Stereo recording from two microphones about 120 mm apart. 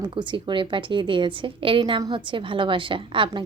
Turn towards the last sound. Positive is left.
turn(degrees=-45)  # may be behind; listen again after turning